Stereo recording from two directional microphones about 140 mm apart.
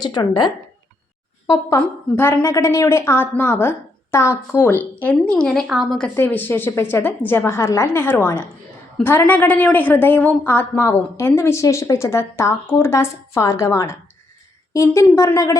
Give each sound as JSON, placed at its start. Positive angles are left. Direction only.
{"t": 0.0, "sound": "speech", "side_deg": 30}
{"t": 1.5, "sound": "a woman's voice", "side_deg": 20}
{"t": 6.1, "sound": "a woman's voice", "side_deg": 15}